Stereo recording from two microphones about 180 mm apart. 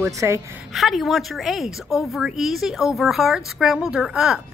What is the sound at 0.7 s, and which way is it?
A woman's voice, centre (ahead or behind).